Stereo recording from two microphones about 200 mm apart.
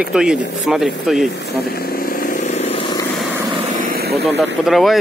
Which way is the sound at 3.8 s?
45° right (ahead or behind).